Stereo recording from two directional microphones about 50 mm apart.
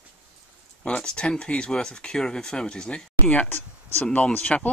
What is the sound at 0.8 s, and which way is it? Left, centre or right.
Speech, left.